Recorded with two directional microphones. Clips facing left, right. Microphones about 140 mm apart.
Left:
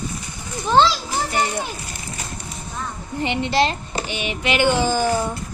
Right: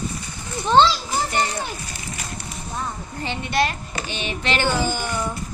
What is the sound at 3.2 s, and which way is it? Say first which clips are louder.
Speech: left 3 dB; 20° left (ahead or behind).